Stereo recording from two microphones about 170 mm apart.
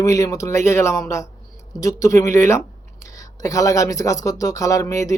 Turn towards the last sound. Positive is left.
turn(degrees=20)  # may be behind; listen again after turning